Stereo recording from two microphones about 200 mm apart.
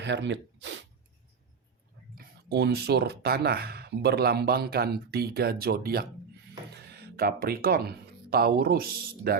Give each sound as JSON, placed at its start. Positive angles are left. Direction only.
{"t": 0.0, "sound": "speech", "side_deg": -60}
{"t": 2.1, "sound": "speech", "side_deg": -55}